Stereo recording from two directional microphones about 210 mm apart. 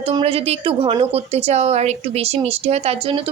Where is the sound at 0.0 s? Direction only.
25° right (ahead or behind).